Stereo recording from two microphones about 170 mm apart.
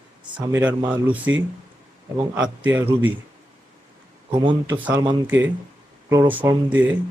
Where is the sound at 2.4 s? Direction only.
10° right (ahead or behind).